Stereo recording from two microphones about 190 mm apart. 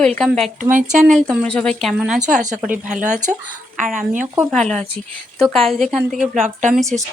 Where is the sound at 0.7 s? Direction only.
40° right (ahead or behind).